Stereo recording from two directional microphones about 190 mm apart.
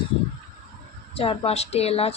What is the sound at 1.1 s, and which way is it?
A woman's voice, 30° left (ahead or behind).